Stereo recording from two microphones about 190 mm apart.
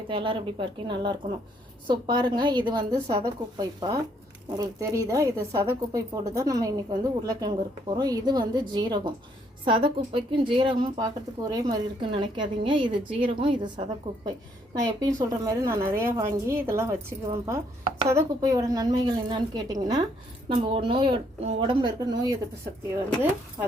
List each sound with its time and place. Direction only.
0.1 s a woman's voice: 25° right (ahead or behind)
15.0 s a woman's voice: 20° right (ahead or behind)
23.6 s speech: 15° right (ahead or behind)